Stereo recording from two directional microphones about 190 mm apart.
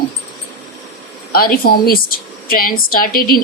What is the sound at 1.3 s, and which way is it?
A woman's voice, 50° left (ahead or behind).